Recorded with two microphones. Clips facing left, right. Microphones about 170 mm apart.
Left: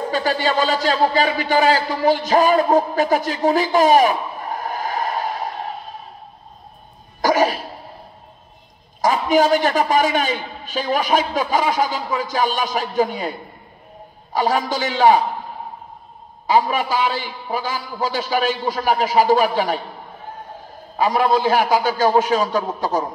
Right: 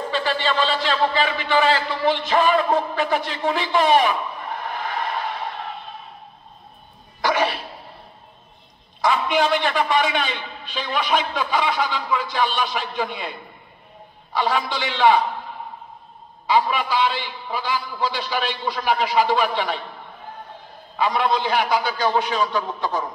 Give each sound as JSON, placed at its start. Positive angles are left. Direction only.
{"t": 0.1, "sound": "speech", "side_deg": 40}
{"t": 7.2, "sound": "cough", "side_deg": 40}
{"t": 9.0, "sound": "a man's voice", "side_deg": 40}
{"t": 16.4, "sound": "a man's voice", "side_deg": 45}
{"t": 20.9, "sound": "a man's voice", "side_deg": 45}